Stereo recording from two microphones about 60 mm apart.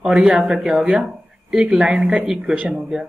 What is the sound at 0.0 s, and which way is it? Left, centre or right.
Speech, centre.